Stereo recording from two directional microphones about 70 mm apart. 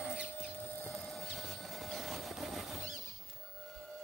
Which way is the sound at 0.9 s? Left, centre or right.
Centre.